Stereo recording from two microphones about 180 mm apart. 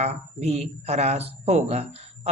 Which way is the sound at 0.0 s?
35° right (ahead or behind).